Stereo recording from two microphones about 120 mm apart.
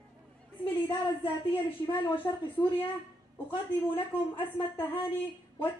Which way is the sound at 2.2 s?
30° left (ahead or behind).